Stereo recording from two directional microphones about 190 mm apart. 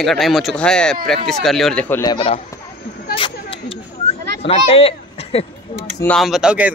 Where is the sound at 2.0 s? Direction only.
25° left (ahead or behind).